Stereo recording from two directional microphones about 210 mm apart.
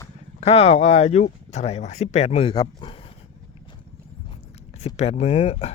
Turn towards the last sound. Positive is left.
turn(degrees=30)  # may be behind; listen again after turning